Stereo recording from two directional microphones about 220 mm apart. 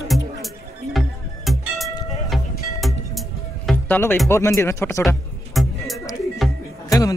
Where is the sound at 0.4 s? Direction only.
Centre (ahead or behind).